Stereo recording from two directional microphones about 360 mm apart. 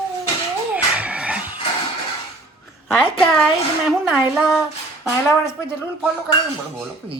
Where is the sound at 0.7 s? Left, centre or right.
Centre.